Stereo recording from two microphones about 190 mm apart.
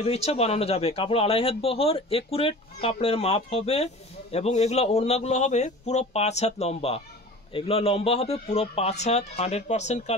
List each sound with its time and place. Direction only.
0.0 s speech: 35° left (ahead or behind)